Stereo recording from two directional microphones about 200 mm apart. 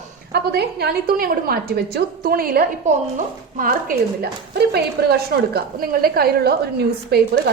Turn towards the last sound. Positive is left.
turn(degrees=-55)  # may be behind; listen again after turning